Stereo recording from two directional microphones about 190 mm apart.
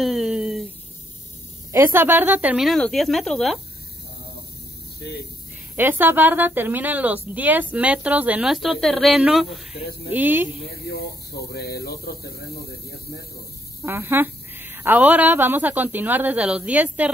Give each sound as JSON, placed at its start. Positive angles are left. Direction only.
{"t": 0.0, "sound": "a sound", "side_deg": 0}
{"t": 1.7, "sound": "speech", "side_deg": -10}
{"t": 5.0, "sound": "speech", "side_deg": 60}
{"t": 5.8, "sound": "a woman's voice", "side_deg": -10}
{"t": 10.9, "sound": "speech", "side_deg": 55}
{"t": 13.8, "sound": "a woman's voice", "side_deg": -10}